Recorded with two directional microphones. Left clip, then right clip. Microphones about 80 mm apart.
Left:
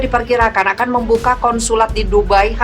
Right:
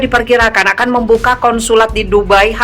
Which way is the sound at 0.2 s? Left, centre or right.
Right.